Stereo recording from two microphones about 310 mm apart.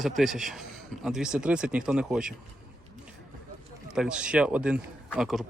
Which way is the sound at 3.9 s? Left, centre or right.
Centre.